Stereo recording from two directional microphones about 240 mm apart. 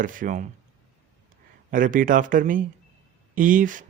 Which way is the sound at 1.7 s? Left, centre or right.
Right.